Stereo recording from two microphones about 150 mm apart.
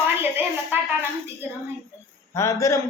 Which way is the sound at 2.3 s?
20° left (ahead or behind).